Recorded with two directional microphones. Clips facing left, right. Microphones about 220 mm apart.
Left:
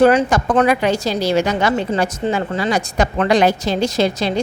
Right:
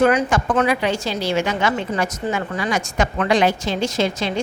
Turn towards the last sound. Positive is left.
turn(degrees=35)  # may be behind; listen again after turning